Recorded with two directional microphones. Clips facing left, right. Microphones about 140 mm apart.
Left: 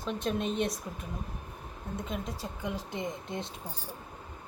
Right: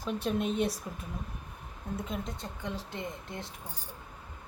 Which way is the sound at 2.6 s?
15° left (ahead or behind).